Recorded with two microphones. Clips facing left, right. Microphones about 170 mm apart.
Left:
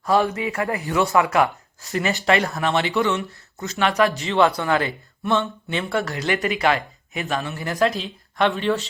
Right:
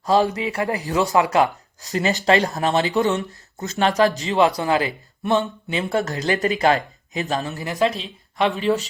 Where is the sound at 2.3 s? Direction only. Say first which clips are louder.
Right 2 dB; 30° right (ahead or behind).